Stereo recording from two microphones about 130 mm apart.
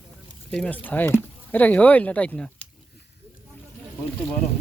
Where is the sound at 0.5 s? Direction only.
10° left (ahead or behind).